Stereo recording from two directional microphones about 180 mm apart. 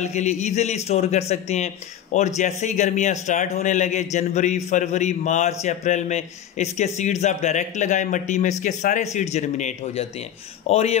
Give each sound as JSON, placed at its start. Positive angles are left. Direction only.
{"t": 0.0, "sound": "speech", "side_deg": 40}